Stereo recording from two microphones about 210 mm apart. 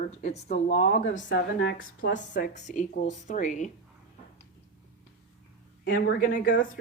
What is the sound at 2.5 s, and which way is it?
A woman's voice, 35° left (ahead or behind).